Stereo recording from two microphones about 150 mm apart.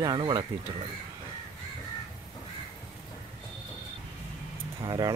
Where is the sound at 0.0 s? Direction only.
30° right (ahead or behind).